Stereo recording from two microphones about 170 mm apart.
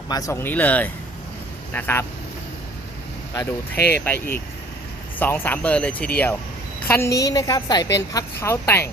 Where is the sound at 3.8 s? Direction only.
70° left (ahead or behind).